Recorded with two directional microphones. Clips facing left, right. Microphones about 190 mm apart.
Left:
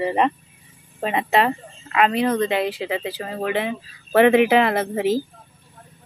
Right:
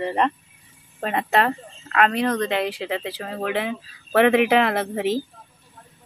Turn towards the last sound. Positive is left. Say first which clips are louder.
# left 2 dB
turn(degrees=0)  # may be behind; listen again after turning